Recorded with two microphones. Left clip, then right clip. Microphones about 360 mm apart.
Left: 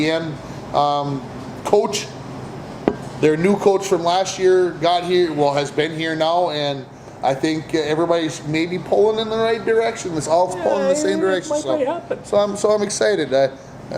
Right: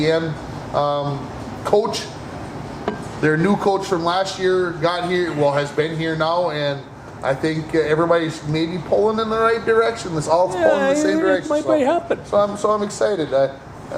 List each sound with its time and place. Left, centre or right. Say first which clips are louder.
0.7 s a man's voice: left 2 dB; centre
3.2 s a man's voice: left 1 dB; centre
10.7 s a man's voice: right 1 dB; right
11.0 s a man's voice: right 1 dB; centre
11.8 s a man's voice: right 4 dB; right
12.3 s speech: left 1 dB; left